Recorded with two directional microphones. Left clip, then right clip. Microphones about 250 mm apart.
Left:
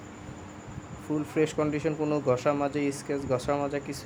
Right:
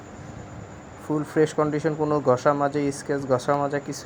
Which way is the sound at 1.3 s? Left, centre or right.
Centre.